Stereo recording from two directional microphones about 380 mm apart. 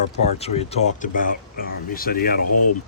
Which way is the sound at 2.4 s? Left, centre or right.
Left.